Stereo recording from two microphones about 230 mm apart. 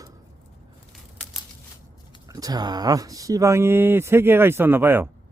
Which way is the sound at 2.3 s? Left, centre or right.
Centre.